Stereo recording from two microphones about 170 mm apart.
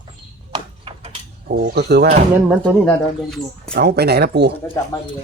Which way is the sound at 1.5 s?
65° right (ahead or behind).